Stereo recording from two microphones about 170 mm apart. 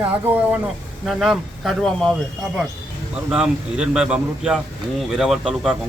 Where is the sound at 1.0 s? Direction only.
Centre (ahead or behind).